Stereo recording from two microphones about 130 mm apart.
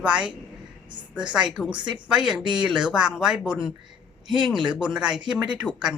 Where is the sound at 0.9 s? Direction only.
35° right (ahead or behind).